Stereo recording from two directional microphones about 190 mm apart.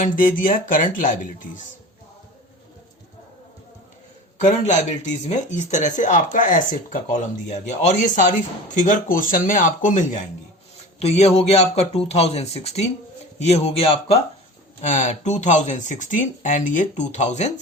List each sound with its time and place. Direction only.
0.0 s speech: 45° left (ahead or behind)
4.4 s speech: 40° left (ahead or behind)